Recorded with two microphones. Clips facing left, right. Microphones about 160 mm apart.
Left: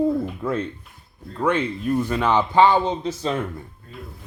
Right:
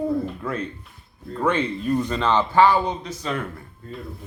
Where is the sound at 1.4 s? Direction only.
10° left (ahead or behind); by 3.4 s 30° left (ahead or behind).